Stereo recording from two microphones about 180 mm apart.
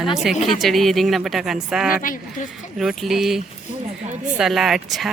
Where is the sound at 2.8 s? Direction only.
Centre (ahead or behind).